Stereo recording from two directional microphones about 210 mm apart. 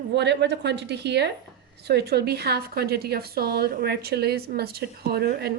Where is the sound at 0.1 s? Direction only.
55° right (ahead or behind).